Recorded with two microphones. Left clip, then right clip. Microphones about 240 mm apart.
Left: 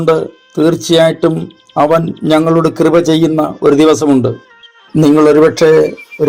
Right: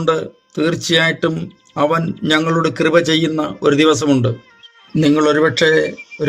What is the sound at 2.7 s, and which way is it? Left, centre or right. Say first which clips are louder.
Speech: left 4 dB; centre.